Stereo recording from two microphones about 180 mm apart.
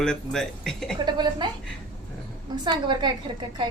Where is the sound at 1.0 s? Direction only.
25° right (ahead or behind).